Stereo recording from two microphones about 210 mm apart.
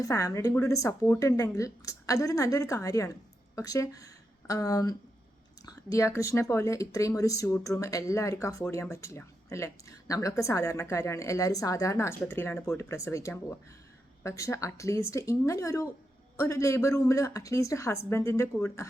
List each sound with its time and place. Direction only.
0.0 s a woman's voice: 15° left (ahead or behind)